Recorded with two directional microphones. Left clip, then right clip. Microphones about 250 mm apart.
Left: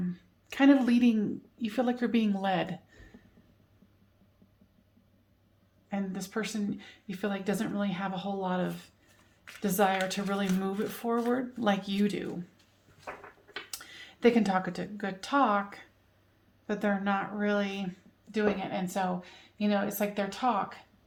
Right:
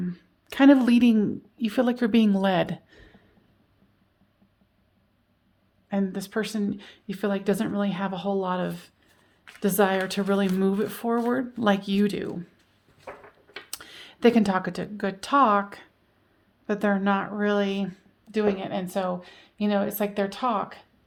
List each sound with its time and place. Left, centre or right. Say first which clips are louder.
0.1 s speech: right 4 dB; right
5.9 s speech: right 7 dB; right
13.7 s speech: right 3 dB; right